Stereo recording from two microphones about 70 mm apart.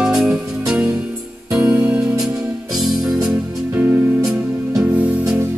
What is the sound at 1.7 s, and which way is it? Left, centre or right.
Music, centre.